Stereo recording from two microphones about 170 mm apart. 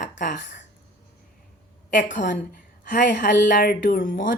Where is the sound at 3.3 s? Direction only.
75° left (ahead or behind); by 4.4 s 55° left (ahead or behind).